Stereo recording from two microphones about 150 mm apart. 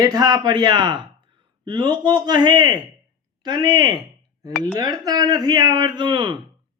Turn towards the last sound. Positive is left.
turn(degrees=-30)  # may be behind; listen again after turning